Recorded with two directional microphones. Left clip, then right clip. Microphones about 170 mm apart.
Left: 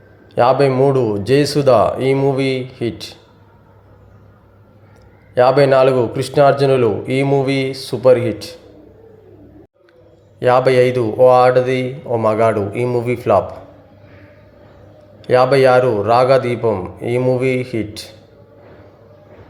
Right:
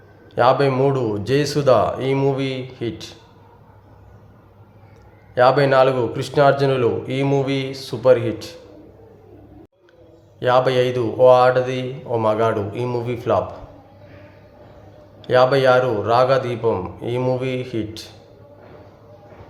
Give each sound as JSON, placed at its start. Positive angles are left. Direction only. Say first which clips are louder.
{"t": 0.3, "sound": "a man's voice", "louder": "left 3 dB", "side_deg": 20}
{"t": 5.3, "sound": "a man's voice", "louder": "left 3 dB", "side_deg": 20}
{"t": 10.4, "sound": "a man's voice", "louder": "left 4 dB", "side_deg": 20}
{"t": 15.2, "sound": "a man's voice", "louder": "left 3 dB", "side_deg": 20}